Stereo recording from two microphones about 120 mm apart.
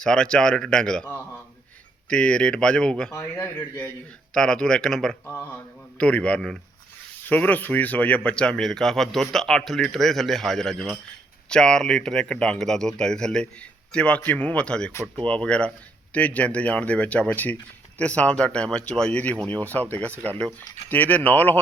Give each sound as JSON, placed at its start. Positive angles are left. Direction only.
{"t": 0.0, "sound": "speech", "side_deg": 5}
{"t": 3.1, "sound": "a man's voice", "side_deg": 25}
{"t": 4.4, "sound": "speech", "side_deg": 5}
{"t": 5.3, "sound": "a man's voice", "side_deg": 20}